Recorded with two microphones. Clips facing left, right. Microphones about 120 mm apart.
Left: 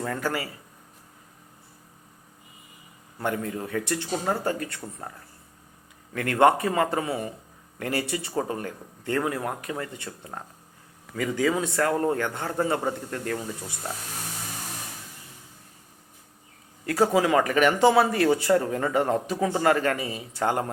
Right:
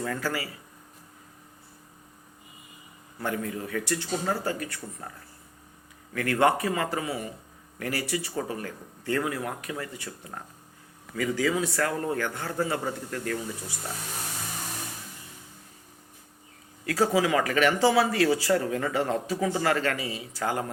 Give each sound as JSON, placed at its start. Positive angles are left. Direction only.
{"t": 0.0, "sound": "speech", "side_deg": 20}
{"t": 3.2, "sound": "speech", "side_deg": 30}
{"t": 6.1, "sound": "speech", "side_deg": 25}
{"t": 16.9, "sound": "speech", "side_deg": 25}